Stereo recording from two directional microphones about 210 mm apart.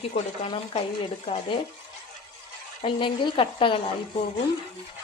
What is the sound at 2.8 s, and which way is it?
Speech, 25° left (ahead or behind).